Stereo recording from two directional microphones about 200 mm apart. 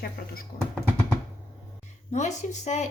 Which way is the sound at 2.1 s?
35° left (ahead or behind).